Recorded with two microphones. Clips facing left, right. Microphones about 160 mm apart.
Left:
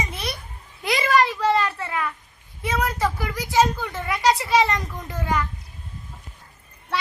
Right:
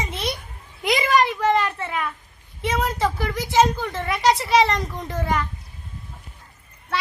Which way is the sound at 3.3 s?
25° right (ahead or behind).